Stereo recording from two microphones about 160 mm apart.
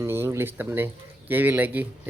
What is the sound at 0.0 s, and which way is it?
Speech, 15° right (ahead or behind).